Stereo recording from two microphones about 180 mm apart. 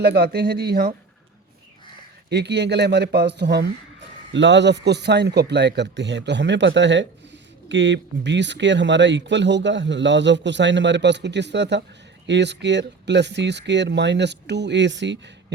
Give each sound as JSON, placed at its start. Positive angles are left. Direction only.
{"t": 0.0, "sound": "speech", "side_deg": -65}
{"t": 2.3, "sound": "speech", "side_deg": -70}
{"t": 4.3, "sound": "speech", "side_deg": -85}